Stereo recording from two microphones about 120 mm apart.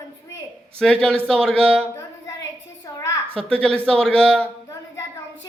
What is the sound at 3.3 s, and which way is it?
A man's voice, 5° left (ahead or behind).